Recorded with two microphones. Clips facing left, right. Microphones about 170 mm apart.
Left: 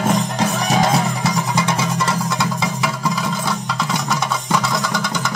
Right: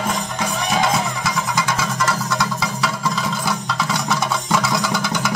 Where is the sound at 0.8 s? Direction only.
35° left (ahead or behind).